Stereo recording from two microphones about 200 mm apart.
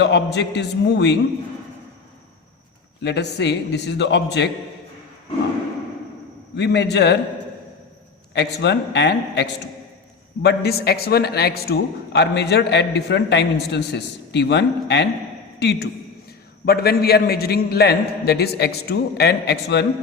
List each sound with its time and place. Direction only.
0.0 s a man's voice: 60° left (ahead or behind)
3.0 s a man's voice: 60° left (ahead or behind)
6.6 s a man's voice: 60° left (ahead or behind)
8.3 s a man's voice: 60° left (ahead or behind)